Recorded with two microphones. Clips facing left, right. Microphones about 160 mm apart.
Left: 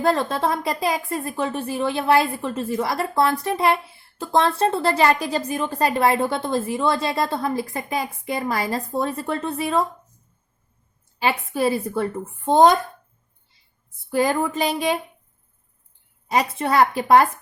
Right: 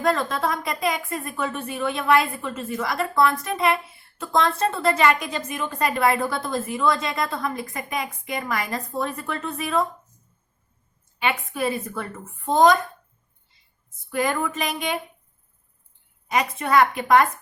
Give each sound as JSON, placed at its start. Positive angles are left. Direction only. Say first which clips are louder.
{"t": 0.0, "sound": "speech", "louder": "left 2 dB", "side_deg": 30}
{"t": 11.2, "sound": "speech", "louder": "left 4 dB", "side_deg": 30}
{"t": 14.1, "sound": "speech", "louder": "left 4 dB", "side_deg": 30}
{"t": 16.3, "sound": "speech", "louder": "left 1 dB", "side_deg": 30}